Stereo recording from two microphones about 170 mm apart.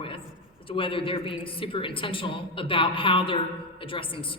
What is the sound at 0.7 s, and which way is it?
A woman's voice, 30° left (ahead or behind).